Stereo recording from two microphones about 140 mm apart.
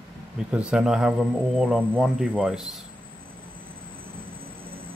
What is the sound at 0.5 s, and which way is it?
Speech, 5° right (ahead or behind).